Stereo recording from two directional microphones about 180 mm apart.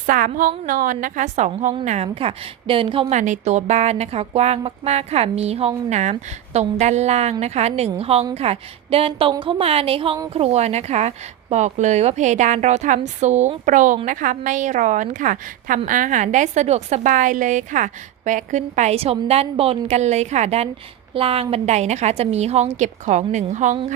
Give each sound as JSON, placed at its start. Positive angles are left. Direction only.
{"t": 0.0, "sound": "a woman's voice", "side_deg": -50}